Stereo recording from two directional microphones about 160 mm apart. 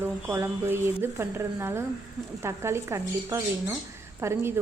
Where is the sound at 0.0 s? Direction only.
15° right (ahead or behind).